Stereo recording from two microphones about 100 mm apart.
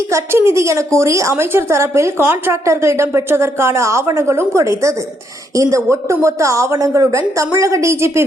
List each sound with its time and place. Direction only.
0.1 s a woman's voice: 25° right (ahead or behind)